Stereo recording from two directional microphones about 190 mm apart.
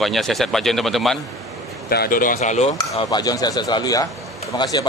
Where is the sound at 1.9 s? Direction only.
50° left (ahead or behind); by 2.7 s 35° left (ahead or behind).